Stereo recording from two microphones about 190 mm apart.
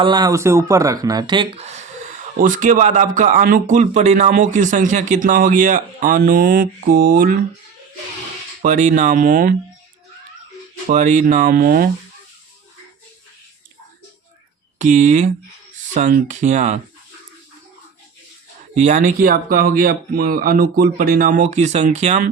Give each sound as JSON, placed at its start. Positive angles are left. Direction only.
{"t": 0.0, "sound": "speech", "side_deg": -20}
{"t": 8.6, "sound": "speech", "side_deg": -40}
{"t": 10.8, "sound": "speech", "side_deg": -40}
{"t": 14.8, "sound": "speech", "side_deg": -40}
{"t": 18.7, "sound": "speech", "side_deg": -40}